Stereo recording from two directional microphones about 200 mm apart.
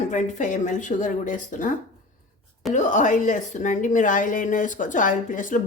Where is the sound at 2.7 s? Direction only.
40° left (ahead or behind).